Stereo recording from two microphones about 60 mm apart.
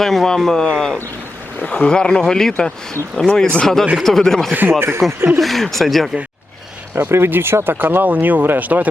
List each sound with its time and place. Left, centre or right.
0.0 s speech: centre
1.6 s speech: left
3.9 s speech: centre
4.8 s speech: right
5.4 s speech: centre
6.9 s speech: right